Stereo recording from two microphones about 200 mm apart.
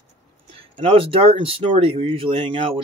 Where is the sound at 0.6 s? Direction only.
30° right (ahead or behind).